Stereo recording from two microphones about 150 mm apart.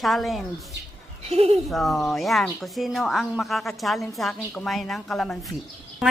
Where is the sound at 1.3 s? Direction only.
45° right (ahead or behind).